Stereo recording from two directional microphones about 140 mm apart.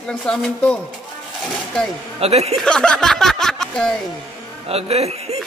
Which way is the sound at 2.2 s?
50° right (ahead or behind).